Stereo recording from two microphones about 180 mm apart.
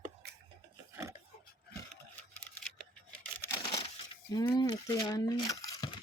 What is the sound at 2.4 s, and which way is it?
Scissors, 5° left (ahead or behind).